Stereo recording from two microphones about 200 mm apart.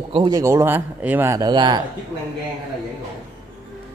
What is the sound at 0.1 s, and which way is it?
Speech, 20° right (ahead or behind).